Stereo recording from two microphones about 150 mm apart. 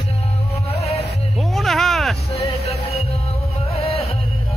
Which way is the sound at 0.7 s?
45° left (ahead or behind).